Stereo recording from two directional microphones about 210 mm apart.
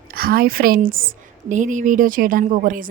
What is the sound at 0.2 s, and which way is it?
A woman's voice, 45° right (ahead or behind).